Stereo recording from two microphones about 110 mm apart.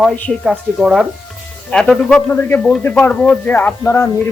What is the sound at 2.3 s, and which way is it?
A man's voice, 20° left (ahead or behind).